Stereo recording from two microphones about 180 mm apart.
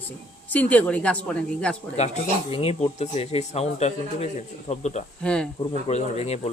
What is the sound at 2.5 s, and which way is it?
Speech, 30° left (ahead or behind).